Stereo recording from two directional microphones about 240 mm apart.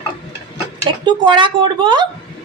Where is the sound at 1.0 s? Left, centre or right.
Centre.